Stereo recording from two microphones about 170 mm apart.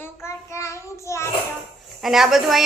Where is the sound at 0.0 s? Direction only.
15° left (ahead or behind).